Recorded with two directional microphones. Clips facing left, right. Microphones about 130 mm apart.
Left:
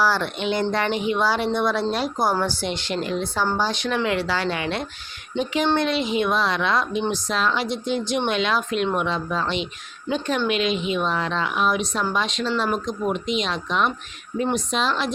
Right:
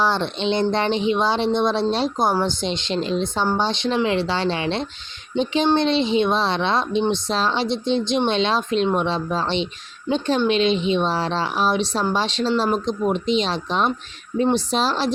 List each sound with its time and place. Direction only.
0.0 s speech: 25° right (ahead or behind)